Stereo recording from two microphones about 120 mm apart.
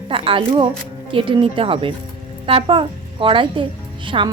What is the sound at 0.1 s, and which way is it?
Speech, 45° right (ahead or behind).